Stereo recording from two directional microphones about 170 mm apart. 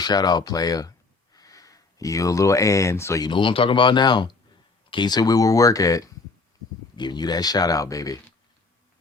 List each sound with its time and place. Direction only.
0.0 s speech: 25° left (ahead or behind)